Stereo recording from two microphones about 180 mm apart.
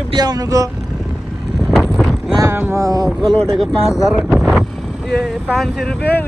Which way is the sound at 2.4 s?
10° right (ahead or behind).